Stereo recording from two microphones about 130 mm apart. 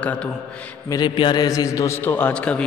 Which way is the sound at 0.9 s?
35° left (ahead or behind).